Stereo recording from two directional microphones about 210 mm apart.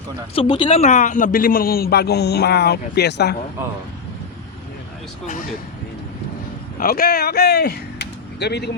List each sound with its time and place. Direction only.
0.3 s speech: 20° left (ahead or behind); by 3.3 s 50° left (ahead or behind)
5.2 s speech: 35° left (ahead or behind)
6.7 s speech: 45° left (ahead or behind)